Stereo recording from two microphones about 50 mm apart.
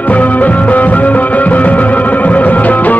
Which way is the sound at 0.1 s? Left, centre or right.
Left.